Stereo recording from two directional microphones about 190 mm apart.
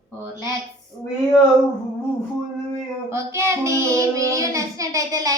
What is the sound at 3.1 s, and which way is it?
Child singing, 15° right (ahead or behind).